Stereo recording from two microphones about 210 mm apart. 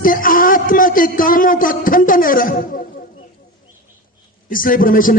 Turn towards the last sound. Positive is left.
turn(degrees=40)  # may be behind; listen again after turning